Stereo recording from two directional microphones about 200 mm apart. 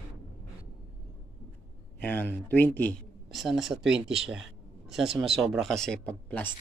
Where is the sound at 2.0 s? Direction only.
10° left (ahead or behind).